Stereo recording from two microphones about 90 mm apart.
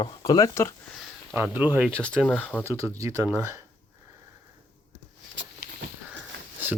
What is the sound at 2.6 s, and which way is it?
Speech, 35° right (ahead or behind).